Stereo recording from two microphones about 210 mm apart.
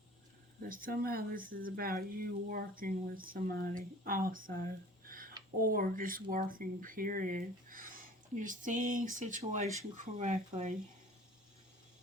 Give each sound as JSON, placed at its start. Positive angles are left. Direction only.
{"t": 0.6, "sound": "speech", "side_deg": -45}